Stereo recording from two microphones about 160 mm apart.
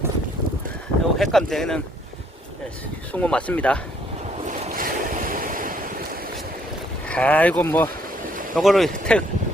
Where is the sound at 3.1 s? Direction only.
5° left (ahead or behind).